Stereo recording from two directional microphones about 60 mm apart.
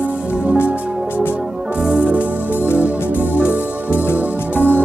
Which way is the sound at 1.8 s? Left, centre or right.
Centre.